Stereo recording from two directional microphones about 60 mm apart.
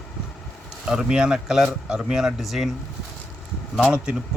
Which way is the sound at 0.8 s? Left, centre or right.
Centre.